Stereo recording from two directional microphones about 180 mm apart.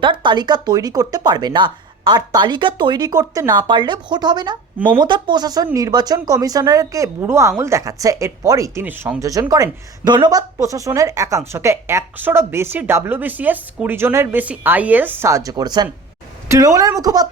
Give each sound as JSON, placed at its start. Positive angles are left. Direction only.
{"t": 0.0, "sound": "speech", "side_deg": -25}